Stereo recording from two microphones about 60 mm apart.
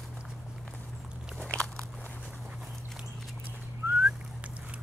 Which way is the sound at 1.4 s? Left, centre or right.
Left.